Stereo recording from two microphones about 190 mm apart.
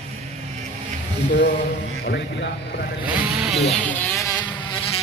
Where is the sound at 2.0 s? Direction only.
55° left (ahead or behind).